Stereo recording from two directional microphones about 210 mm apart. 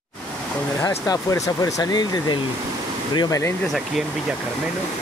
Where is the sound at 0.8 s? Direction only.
15° left (ahead or behind).